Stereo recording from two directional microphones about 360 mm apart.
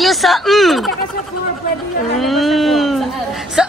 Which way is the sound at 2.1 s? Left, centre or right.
Centre.